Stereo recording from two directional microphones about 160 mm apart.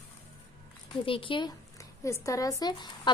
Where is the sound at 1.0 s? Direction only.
35° left (ahead or behind).